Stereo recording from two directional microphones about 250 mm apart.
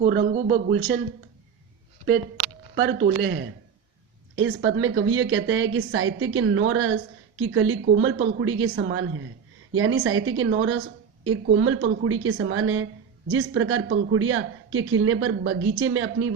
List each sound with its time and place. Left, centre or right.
0.1 s speech: right
0.8 s a woman's voice: right
2.7 s a woman's voice: right